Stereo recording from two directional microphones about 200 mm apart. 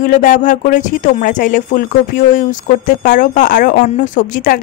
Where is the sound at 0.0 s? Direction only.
40° left (ahead or behind).